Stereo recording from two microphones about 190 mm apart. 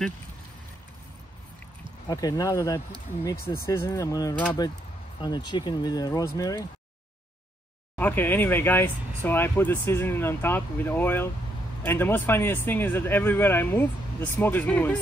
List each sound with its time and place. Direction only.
2.0 s speech: 20° left (ahead or behind)
7.9 s speech: 10° left (ahead or behind)